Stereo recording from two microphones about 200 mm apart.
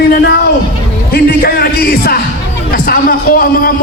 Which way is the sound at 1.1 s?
50° left (ahead or behind).